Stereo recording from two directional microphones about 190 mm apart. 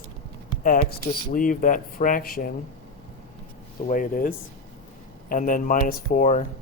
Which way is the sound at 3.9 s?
45° left (ahead or behind).